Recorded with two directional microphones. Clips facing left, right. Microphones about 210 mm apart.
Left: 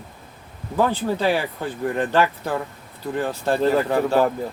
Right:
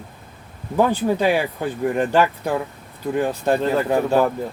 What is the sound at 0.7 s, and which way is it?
Speech, 15° right (ahead or behind).